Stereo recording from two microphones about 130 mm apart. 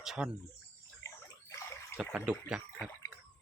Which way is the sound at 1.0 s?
25° left (ahead or behind).